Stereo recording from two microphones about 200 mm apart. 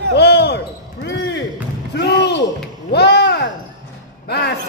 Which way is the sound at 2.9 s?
55° left (ahead or behind).